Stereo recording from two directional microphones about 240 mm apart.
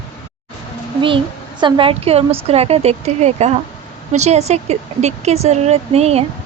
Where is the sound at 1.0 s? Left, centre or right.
Right.